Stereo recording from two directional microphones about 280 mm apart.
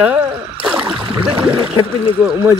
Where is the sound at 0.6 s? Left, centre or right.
Centre.